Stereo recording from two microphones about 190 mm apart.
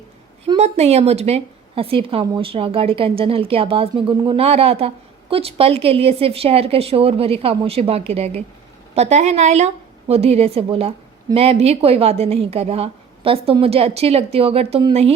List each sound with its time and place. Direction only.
0.4 s a woman's voice: 30° right (ahead or behind)